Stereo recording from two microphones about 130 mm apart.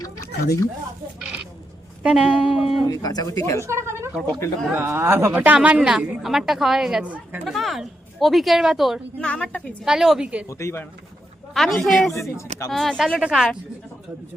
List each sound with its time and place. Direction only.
0.0 s a sound: 25° left (ahead or behind)
2.0 s a woman's voice: 10° right (ahead or behind)
2.9 s speech: 30° left (ahead or behind)
3.7 s a woman's voice: 20° right (ahead or behind)
7.4 s a woman's voice: centre (ahead or behind)
9.1 s a woman's voice: 10° left (ahead or behind)
9.8 s a woman's voice: 5° right (ahead or behind)
10.5 s speech: 20° left (ahead or behind)
11.5 s a woman's voice: centre (ahead or behind)